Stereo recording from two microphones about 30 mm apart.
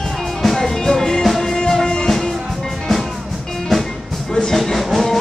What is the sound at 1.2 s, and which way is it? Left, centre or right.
Music, centre.